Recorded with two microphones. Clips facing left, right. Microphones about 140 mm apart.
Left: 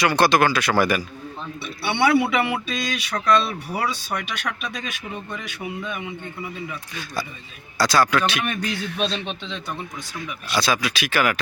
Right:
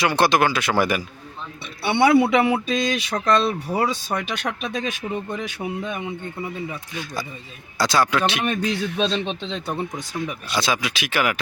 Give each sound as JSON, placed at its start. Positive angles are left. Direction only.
{"t": 0.0, "sound": "speech", "side_deg": -25}
{"t": 5.9, "sound": "speech", "side_deg": -25}